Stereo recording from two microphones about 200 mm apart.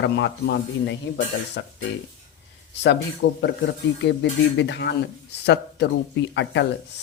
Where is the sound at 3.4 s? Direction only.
60° left (ahead or behind).